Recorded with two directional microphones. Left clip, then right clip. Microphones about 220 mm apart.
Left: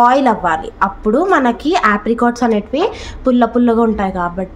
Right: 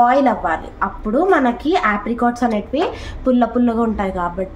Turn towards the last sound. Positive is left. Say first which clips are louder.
# left 4 dB
turn(degrees=25)  # may be behind; listen again after turning